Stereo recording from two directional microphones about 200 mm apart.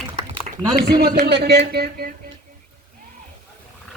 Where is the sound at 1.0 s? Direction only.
55° right (ahead or behind).